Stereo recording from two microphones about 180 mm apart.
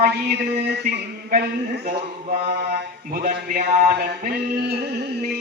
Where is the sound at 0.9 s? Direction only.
60° right (ahead or behind).